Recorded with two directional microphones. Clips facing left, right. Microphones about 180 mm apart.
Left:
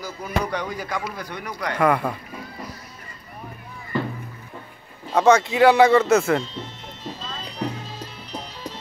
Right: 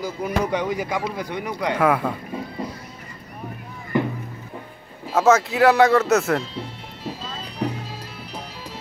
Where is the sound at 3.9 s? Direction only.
15° right (ahead or behind).